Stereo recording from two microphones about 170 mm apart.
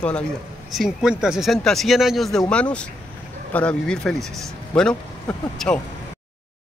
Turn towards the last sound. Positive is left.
turn(degrees=5)  # may be behind; listen again after turning